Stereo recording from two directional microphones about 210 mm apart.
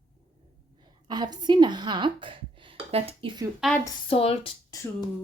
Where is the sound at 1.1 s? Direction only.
20° right (ahead or behind).